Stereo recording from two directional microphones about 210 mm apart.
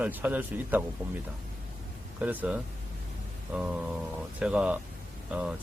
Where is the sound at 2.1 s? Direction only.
10° right (ahead or behind).